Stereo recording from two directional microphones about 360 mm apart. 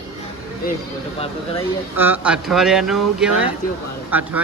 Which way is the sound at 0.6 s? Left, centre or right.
Left.